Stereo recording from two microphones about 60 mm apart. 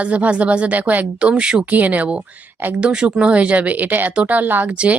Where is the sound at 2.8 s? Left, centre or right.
Centre; by 4.7 s right.